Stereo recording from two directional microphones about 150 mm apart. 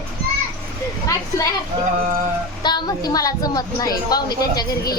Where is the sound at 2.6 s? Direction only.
30° left (ahead or behind).